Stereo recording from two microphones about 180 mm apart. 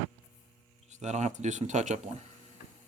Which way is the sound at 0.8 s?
40° right (ahead or behind).